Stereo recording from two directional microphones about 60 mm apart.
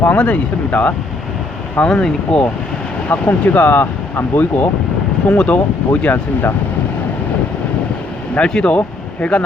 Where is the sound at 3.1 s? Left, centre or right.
Left.